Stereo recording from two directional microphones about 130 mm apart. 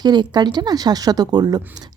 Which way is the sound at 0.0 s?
35° right (ahead or behind).